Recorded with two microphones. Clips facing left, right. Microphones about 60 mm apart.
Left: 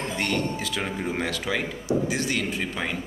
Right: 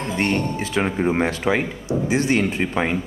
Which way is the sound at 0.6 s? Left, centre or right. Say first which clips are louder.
Right 7 dB; right.